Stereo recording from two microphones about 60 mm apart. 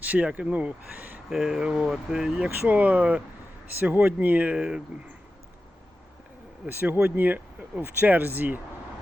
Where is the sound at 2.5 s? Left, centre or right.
Right.